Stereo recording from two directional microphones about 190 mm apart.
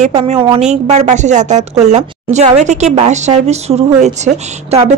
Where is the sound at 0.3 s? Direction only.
30° right (ahead or behind).